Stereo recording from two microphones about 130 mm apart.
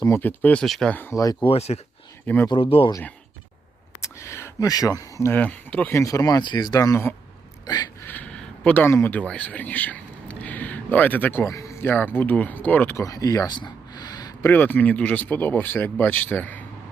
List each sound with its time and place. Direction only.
0.0 s speech: 15° left (ahead or behind)
0.6 s speech: 5° left (ahead or behind)
1.1 s speech: 25° left (ahead or behind)
1.5 s speech: 55° left (ahead or behind)
2.2 s speech: 15° left (ahead or behind)
2.5 s speech: 45° left (ahead or behind)
4.0 s speech: 20° left (ahead or behind)
8.0 s speech: 10° left (ahead or behind); by 13.6 s 25° left (ahead or behind)
13.6 s a sound: 30° left (ahead or behind)
14.4 s speech: 15° left (ahead or behind)